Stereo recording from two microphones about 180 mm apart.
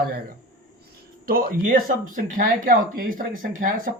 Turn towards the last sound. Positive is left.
turn(degrees=-50)  # may be behind; listen again after turning